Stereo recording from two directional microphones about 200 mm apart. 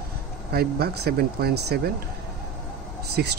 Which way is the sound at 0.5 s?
50° right (ahead or behind).